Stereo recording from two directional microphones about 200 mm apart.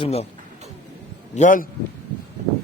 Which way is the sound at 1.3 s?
40° left (ahead or behind).